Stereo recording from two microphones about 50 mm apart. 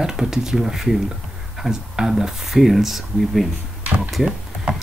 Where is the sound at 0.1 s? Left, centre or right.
Centre.